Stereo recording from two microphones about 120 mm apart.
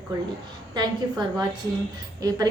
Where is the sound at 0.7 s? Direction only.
35° right (ahead or behind).